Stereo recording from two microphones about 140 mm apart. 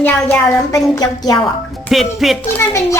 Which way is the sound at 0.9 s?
25° left (ahead or behind).